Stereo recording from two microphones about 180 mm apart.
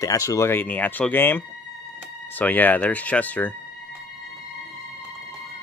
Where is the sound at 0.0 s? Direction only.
20° left (ahead or behind).